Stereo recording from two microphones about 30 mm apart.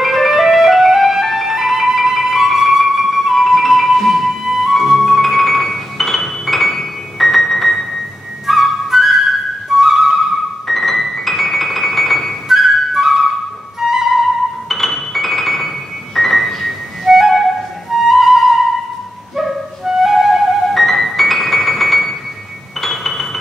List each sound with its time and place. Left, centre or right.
0.0 s music: centre
2.8 s flute: centre
4.5 s music: centre
8.5 s flute: centre
10.7 s music: centre
12.4 s flute: centre
13.7 s music: centre
14.7 s music: centre
17.0 s music: centre
17.9 s flute: centre
19.3 s music: centre
20.7 s music: centre